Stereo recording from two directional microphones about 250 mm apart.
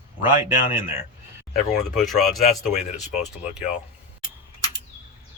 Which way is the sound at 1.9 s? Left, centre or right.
Centre.